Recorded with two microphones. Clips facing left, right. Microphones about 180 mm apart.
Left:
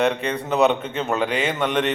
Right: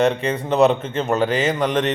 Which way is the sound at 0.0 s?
Centre (ahead or behind).